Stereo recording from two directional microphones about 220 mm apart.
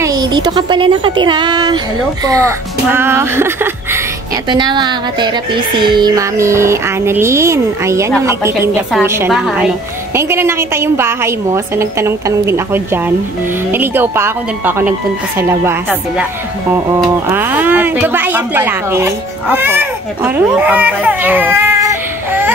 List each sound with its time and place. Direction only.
0.0 s speech: 15° right (ahead or behind)
16.9 s speech: 10° right (ahead or behind)